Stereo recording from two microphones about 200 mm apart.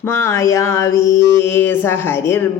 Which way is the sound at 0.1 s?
15° left (ahead or behind).